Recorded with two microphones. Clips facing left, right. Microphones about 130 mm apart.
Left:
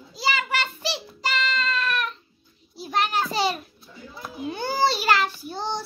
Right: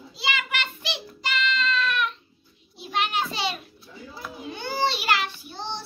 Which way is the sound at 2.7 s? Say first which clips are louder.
Left 2 dB; 40° left (ahead or behind).